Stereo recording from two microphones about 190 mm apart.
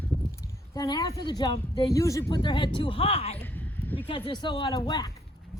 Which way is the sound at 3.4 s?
10° left (ahead or behind).